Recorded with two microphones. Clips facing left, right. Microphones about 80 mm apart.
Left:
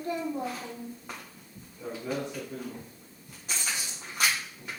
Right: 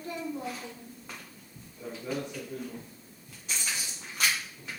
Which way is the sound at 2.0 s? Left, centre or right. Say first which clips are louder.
Left 1 dB; centre.